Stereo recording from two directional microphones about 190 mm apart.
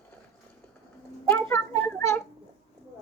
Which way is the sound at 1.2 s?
10° left (ahead or behind).